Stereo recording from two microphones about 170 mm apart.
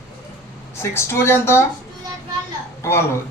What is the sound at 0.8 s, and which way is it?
Speech, 15° left (ahead or behind).